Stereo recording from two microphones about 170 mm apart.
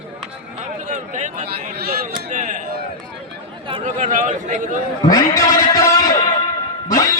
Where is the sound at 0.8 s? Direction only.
45° right (ahead or behind).